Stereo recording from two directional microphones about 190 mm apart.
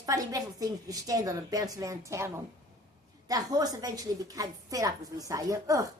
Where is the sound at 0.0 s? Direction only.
20° right (ahead or behind).